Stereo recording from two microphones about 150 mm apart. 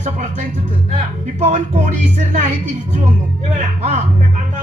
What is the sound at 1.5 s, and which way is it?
Speech, 50° right (ahead or behind).